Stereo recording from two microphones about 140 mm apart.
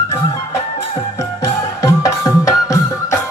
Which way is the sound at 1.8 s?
20° left (ahead or behind).